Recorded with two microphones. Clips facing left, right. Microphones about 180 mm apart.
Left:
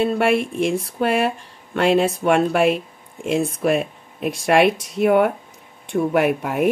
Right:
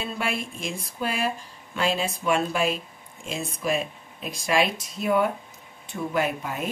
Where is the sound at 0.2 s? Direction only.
65° left (ahead or behind).